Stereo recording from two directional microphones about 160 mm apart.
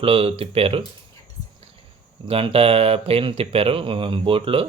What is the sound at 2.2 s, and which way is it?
Speech, 35° right (ahead or behind).